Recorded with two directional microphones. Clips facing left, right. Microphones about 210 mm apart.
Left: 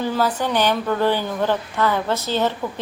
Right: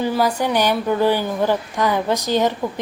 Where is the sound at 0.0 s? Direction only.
10° right (ahead or behind).